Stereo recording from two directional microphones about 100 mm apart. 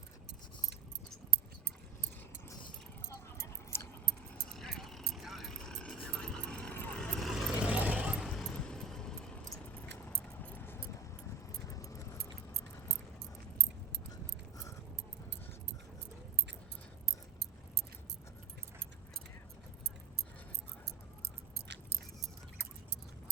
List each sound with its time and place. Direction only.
3.2 s keys jangling: 25° left (ahead or behind)
4.5 s vehicle: 5° left (ahead or behind)
5.7 s a sound: 10° left (ahead or behind)
6.1 s vehicle: 10° left (ahead or behind)
7.7 s vehicle: 15° right (ahead or behind)
8.4 s vehicle: 5° left (ahead or behind)
10.4 s keys jangling: 20° left (ahead or behind)
11.7 s keys jangling: 35° left (ahead or behind)